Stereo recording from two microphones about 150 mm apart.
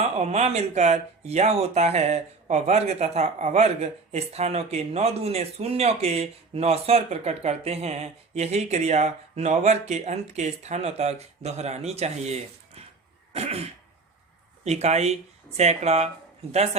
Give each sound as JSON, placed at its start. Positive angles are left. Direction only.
{"t": 0.0, "sound": "speech", "side_deg": -45}